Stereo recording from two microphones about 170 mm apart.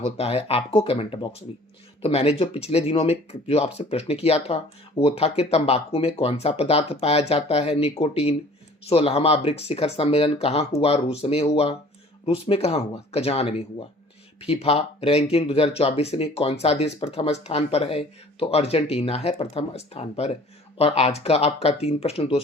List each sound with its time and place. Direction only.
0.0 s speech: 35° left (ahead or behind)